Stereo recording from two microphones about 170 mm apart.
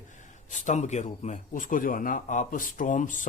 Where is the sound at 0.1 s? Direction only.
50° left (ahead or behind).